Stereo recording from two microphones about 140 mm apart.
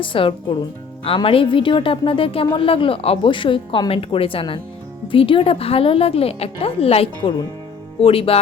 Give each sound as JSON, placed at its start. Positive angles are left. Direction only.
{"t": 0.0, "sound": "a woman's voice", "side_deg": 40}
{"t": 7.2, "sound": "a woman's voice", "side_deg": 30}
{"t": 8.0, "sound": "speech", "side_deg": 40}